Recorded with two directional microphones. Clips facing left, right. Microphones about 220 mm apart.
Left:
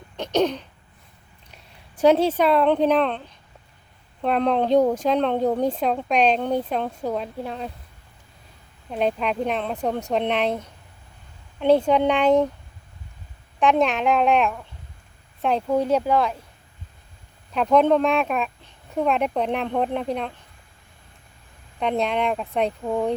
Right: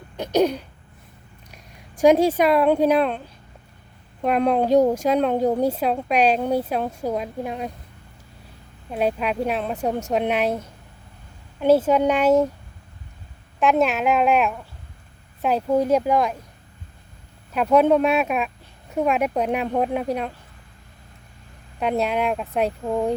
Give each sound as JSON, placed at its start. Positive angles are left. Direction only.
{"t": 0.2, "sound": "speech", "side_deg": -10}
{"t": 8.9, "sound": "speech", "side_deg": -5}
{"t": 13.6, "sound": "speech", "side_deg": -5}
{"t": 17.5, "sound": "speech", "side_deg": -5}
{"t": 21.8, "sound": "speech", "side_deg": -5}